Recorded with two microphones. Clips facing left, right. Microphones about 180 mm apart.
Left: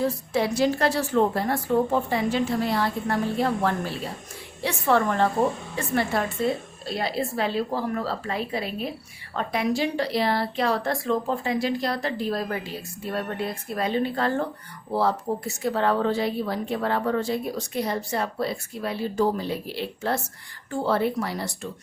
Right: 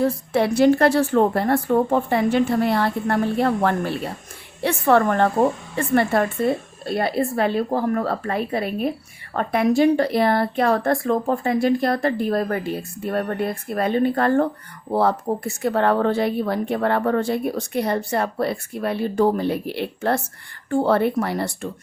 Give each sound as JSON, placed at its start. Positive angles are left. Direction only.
{"t": 0.0, "sound": "speech", "side_deg": -60}